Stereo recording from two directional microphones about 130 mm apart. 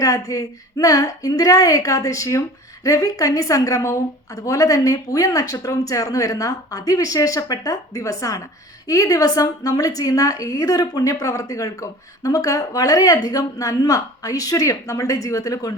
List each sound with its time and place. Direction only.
0.0 s a woman's voice: 25° left (ahead or behind)